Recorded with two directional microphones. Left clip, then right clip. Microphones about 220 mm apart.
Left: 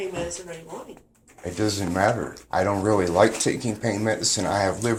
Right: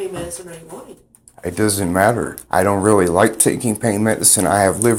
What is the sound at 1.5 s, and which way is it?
Speech, 45° right (ahead or behind).